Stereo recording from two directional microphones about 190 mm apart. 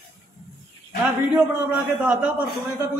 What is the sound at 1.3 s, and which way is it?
Speech, 10° right (ahead or behind).